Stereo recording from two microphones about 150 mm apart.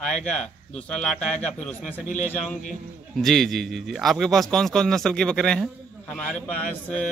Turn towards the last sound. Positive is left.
turn(degrees=10)  # may be behind; listen again after turning